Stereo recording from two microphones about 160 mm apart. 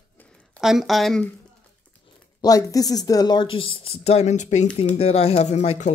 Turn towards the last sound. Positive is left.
turn(degrees=45)  # may be behind; listen again after turning